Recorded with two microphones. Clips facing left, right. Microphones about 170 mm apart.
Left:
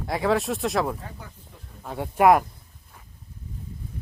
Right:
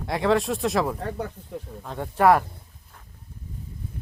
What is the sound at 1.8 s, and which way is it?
Speech, 10° left (ahead or behind).